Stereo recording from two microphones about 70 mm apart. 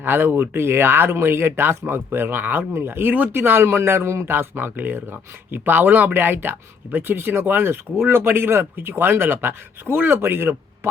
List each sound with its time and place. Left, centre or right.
0.0 s speech: right